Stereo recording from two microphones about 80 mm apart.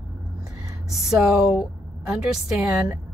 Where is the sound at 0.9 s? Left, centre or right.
Centre.